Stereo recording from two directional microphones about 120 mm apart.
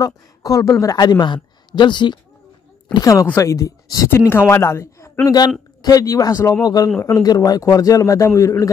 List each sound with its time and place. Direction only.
0.0 s a woman's voice: 30° left (ahead or behind)
2.9 s a man's voice: 30° left (ahead or behind)